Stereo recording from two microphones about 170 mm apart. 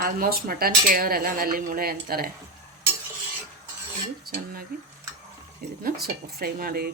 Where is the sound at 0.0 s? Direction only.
60° right (ahead or behind).